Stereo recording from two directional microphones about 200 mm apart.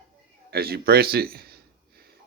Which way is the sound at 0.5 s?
50° right (ahead or behind).